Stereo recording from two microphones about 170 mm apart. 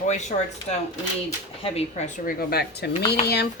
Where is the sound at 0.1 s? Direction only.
45° left (ahead or behind).